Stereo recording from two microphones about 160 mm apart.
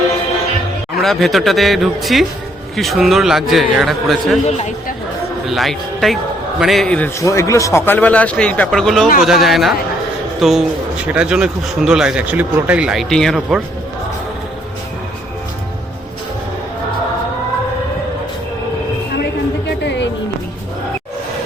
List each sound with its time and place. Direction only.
1.0 s a man's voice: centre (ahead or behind)
4.4 s a woman's voice: 45° left (ahead or behind)
5.5 s a man's voice: centre (ahead or behind)
7.2 s a man's voice: 20° left (ahead or behind); by 13.6 s centre (ahead or behind)
19.6 s music: 90° left